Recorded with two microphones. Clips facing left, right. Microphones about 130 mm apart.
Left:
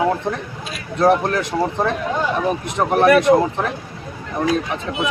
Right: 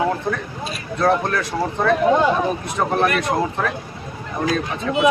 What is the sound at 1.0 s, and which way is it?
Speech, 20° left (ahead or behind).